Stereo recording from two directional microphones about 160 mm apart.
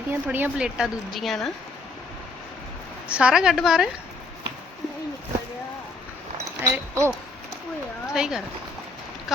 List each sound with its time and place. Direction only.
0.1 s a woman's voice: 10° right (ahead or behind)
3.1 s a woman's voice: 5° right (ahead or behind)
6.3 s a sound: 15° right (ahead or behind)
8.1 s a woman's voice: 5° right (ahead or behind)